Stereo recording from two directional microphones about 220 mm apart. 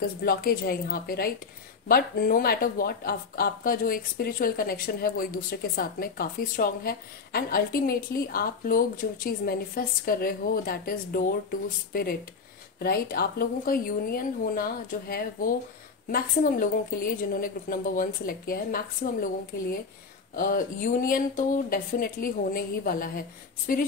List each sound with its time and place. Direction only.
0.2 s a woman's voice: 45° left (ahead or behind)
20.3 s speech: 40° left (ahead or behind)